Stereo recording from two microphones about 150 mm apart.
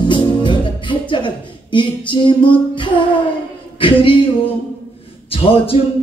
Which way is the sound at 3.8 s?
35° left (ahead or behind).